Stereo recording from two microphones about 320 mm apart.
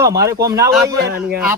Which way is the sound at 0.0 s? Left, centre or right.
Centre.